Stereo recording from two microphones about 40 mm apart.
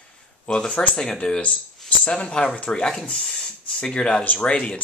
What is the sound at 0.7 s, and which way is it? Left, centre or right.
Speech, left.